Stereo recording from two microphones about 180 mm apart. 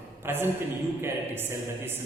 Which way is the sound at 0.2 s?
10° right (ahead or behind).